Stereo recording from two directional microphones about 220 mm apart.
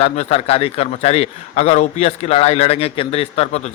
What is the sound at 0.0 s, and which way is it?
A man's voice, 30° left (ahead or behind).